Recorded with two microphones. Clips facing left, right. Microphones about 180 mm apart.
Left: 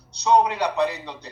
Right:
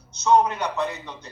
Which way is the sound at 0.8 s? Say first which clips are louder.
Left 4 dB; 35° left (ahead or behind).